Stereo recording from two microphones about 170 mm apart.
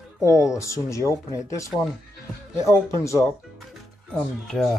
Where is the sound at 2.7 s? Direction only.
15° left (ahead or behind).